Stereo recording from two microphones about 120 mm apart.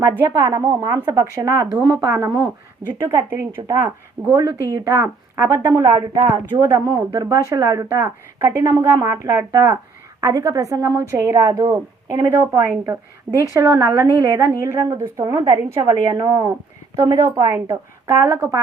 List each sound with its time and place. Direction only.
0.3 s a woman's voice: 25° right (ahead or behind)
13.5 s speech: 35° right (ahead or behind)
14.0 s a woman's voice: 25° right (ahead or behind)